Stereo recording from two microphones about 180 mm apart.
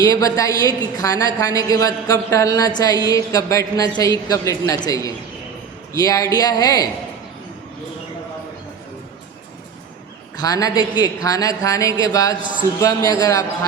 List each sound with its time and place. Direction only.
0.0 s a woman's voice: 20° left (ahead or behind)
10.3 s a woman's voice: 20° left (ahead or behind)